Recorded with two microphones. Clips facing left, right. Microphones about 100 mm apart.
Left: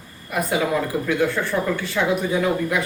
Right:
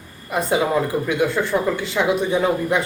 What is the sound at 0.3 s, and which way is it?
A man's voice, 25° right (ahead or behind).